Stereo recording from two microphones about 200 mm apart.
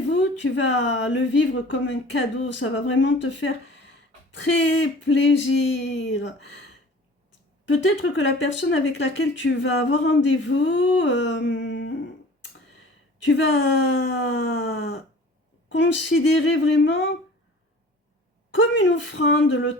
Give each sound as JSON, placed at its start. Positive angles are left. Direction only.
{"t": 0.1, "sound": "speech", "side_deg": 65}
{"t": 7.6, "sound": "speech", "side_deg": 70}
{"t": 13.2, "sound": "speech", "side_deg": 70}
{"t": 15.7, "sound": "speech", "side_deg": 65}
{"t": 18.5, "sound": "speech", "side_deg": 70}